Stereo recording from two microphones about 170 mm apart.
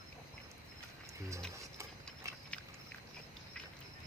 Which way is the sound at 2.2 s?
15° right (ahead or behind).